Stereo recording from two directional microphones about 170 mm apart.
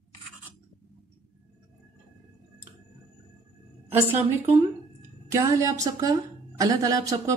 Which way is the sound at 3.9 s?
10° right (ahead or behind).